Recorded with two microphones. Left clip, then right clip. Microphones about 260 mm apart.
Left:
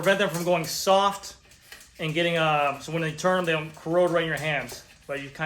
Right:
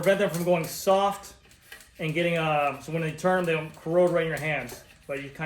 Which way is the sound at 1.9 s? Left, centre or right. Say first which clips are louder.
Left 2 dB; centre.